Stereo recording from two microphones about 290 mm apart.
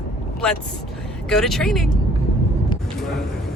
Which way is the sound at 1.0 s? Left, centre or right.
Centre.